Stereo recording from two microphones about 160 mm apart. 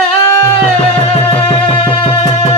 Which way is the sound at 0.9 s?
35° left (ahead or behind).